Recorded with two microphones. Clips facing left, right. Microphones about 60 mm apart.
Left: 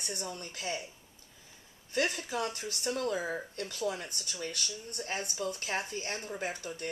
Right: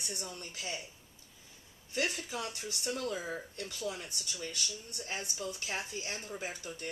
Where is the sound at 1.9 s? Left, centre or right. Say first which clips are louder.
Left 4 dB; left.